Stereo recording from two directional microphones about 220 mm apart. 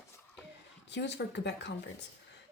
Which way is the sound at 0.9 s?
50° left (ahead or behind).